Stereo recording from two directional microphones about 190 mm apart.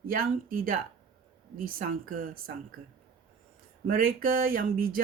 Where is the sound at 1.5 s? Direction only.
45° right (ahead or behind).